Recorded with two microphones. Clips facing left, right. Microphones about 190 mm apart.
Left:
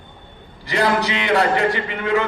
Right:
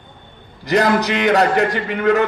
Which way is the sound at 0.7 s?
45° right (ahead or behind).